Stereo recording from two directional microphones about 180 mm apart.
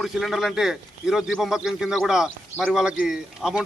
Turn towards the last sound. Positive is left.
turn(degrees=0)  # may be behind; listen again after turning